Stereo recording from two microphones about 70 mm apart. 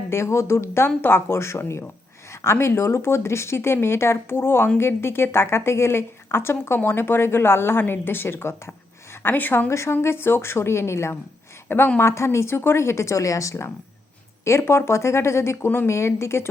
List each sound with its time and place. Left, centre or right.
0.1 s a woman's voice: left
9.7 s a woman's voice: left